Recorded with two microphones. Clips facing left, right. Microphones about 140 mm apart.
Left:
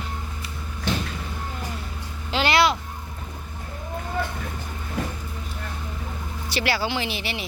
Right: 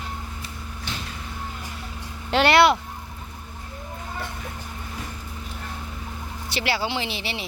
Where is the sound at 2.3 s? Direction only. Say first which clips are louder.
Right 4 dB; 60° right (ahead or behind).